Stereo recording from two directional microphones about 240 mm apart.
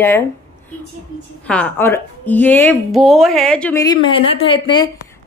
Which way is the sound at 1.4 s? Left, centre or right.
Centre.